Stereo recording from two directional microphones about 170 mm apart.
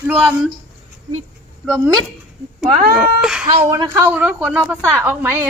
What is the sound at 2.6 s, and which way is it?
A woman's voice, centre (ahead or behind).